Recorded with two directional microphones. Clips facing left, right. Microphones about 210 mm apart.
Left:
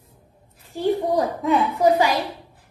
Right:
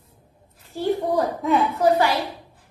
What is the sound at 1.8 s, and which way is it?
Speech, 15° left (ahead or behind).